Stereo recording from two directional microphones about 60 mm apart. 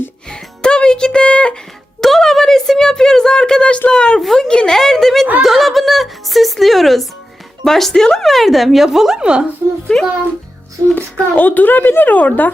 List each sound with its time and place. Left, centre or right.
0.3 s music: centre
2.0 s a sound: centre
4.2 s speech: centre
4.4 s a sound: centre
5.4 s music: centre
7.6 s a woman's voice: centre
10.9 s a woman's voice: left